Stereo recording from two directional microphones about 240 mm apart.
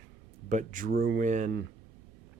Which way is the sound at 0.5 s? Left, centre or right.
Right.